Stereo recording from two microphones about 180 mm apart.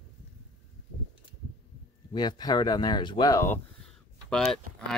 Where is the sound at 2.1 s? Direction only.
25° left (ahead or behind); by 4.6 s 5° left (ahead or behind).